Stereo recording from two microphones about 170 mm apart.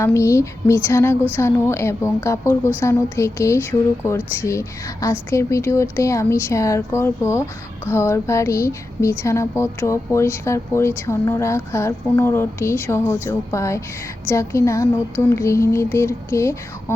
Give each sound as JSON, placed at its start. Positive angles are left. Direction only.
{"t": 0.0, "sound": "speech", "side_deg": 15}